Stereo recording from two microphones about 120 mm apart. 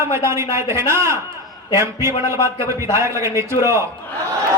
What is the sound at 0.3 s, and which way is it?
Speech, 25° right (ahead or behind).